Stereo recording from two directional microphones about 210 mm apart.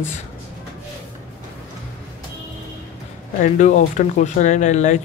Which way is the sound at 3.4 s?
35° left (ahead or behind).